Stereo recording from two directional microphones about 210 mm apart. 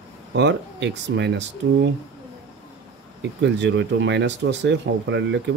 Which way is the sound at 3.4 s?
55° right (ahead or behind).